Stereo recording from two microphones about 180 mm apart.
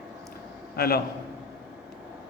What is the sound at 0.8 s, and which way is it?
Speech, 60° left (ahead or behind).